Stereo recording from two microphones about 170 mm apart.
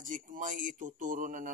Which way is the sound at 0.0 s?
50° right (ahead or behind).